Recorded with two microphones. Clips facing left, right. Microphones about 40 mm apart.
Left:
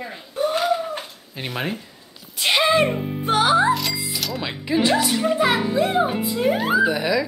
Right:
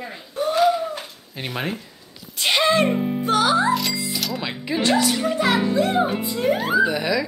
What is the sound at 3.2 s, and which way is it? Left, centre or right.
Music, left.